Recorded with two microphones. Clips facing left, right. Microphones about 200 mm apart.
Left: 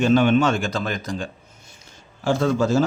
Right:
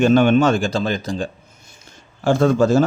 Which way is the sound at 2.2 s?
50° right (ahead or behind).